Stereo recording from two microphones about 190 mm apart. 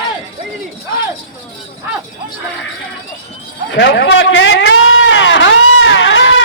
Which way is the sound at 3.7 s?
65° left (ahead or behind).